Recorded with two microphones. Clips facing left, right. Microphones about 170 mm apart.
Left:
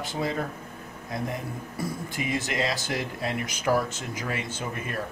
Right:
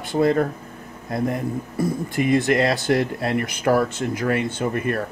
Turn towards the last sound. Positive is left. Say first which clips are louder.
# right 10 dB
turn(degrees=-55)  # may be behind; listen again after turning